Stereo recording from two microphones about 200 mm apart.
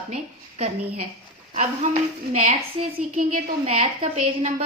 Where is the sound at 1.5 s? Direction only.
35° right (ahead or behind).